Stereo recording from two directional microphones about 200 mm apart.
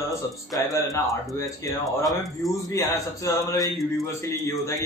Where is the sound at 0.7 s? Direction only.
15° left (ahead or behind).